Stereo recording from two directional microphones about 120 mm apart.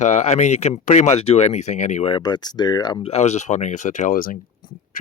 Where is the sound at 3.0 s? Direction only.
65° left (ahead or behind); by 4.1 s 90° left.